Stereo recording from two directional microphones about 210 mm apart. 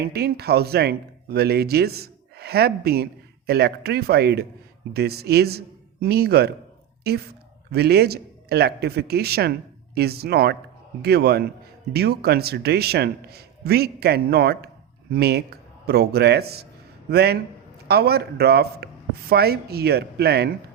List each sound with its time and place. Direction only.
0.0 s speech: 50° right (ahead or behind)